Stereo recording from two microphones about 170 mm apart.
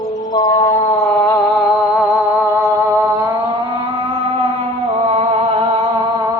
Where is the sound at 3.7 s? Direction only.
35° right (ahead or behind).